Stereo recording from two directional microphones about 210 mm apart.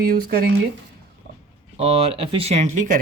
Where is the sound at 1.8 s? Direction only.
30° right (ahead or behind).